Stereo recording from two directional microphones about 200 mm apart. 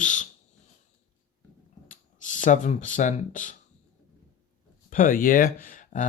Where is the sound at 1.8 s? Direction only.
40° left (ahead or behind).